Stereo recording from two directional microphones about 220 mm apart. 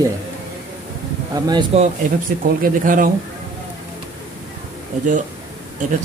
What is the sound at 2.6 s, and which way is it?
Speech, 40° right (ahead or behind).